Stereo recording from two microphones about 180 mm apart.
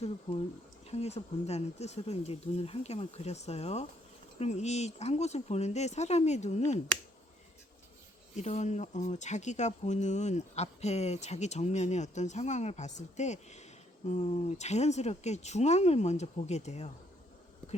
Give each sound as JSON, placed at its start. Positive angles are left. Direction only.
{"t": 0.9, "sound": "speech", "side_deg": 35}
{"t": 8.4, "sound": "speech", "side_deg": 40}